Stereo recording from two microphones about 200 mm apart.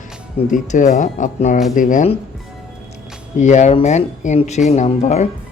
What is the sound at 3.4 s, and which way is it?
Speech, 35° left (ahead or behind).